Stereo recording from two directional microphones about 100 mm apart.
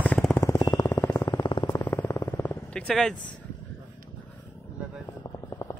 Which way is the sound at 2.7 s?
5° left (ahead or behind).